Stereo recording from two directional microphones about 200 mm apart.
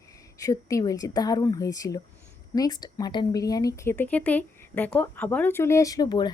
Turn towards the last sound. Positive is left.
turn(degrees=20)  # may be behind; listen again after turning